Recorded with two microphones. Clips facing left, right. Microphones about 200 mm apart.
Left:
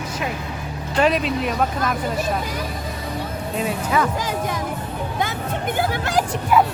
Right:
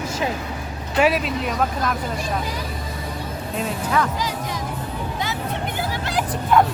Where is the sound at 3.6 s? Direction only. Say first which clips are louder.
Left 1 dB; 5° left (ahead or behind).